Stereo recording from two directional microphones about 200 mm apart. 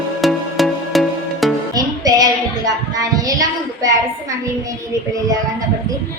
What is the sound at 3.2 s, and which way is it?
Child singing, 15° right (ahead or behind).